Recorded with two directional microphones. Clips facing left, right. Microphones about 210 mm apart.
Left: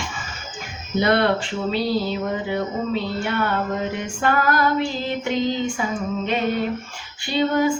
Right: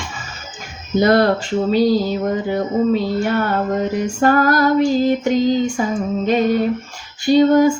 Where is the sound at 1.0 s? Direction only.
40° right (ahead or behind).